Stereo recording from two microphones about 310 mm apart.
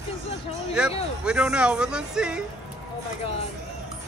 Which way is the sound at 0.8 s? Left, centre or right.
Centre.